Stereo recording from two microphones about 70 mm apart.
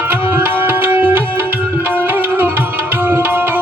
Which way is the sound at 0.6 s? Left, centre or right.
Right.